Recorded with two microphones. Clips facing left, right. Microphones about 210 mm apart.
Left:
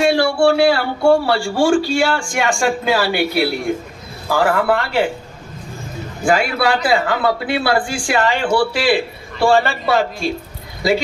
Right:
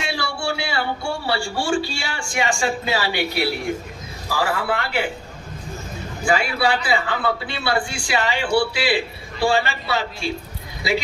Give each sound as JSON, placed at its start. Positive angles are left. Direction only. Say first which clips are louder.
{"t": 0.0, "sound": "a man's voice", "louder": "left 13 dB", "side_deg": 50}
{"t": 6.2, "sound": "speech", "louder": "left 4 dB", "side_deg": 50}